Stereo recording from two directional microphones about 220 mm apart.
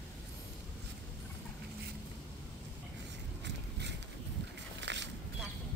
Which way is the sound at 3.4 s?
50° right (ahead or behind).